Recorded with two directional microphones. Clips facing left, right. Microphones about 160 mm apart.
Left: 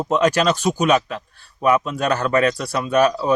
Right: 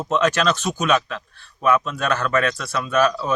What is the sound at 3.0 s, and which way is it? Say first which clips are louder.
Speech: left 2 dB; 15° left (ahead or behind).